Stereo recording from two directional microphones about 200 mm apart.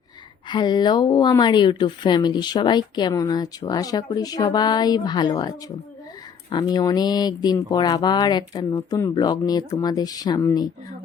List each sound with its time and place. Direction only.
0.4 s a woman's voice: 25° left (ahead or behind)